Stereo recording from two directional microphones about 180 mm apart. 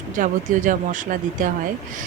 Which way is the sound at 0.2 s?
45° right (ahead or behind).